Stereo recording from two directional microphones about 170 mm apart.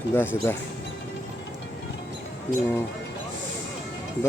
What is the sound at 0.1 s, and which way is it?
Speech, 15° left (ahead or behind).